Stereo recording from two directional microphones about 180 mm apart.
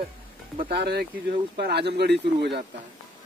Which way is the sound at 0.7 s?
65° right (ahead or behind).